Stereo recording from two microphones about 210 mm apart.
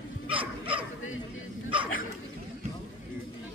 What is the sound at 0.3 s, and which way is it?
Dog, 25° right (ahead or behind).